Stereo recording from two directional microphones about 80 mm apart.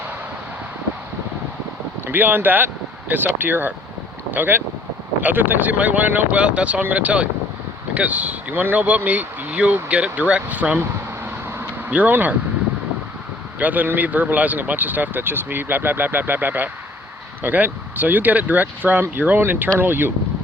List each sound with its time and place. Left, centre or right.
2.0 s speech: right
11.9 s speech: centre
13.6 s speech: right